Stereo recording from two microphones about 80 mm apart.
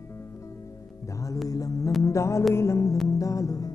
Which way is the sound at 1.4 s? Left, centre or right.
Left.